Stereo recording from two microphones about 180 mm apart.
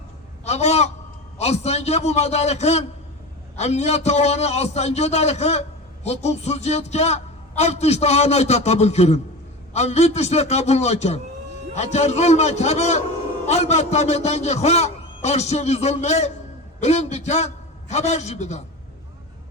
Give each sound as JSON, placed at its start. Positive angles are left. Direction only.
{"t": 0.4, "sound": "a man's voice", "side_deg": 35}